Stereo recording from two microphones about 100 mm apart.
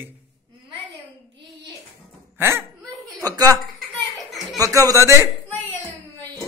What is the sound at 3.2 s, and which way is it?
Speech, 35° right (ahead or behind).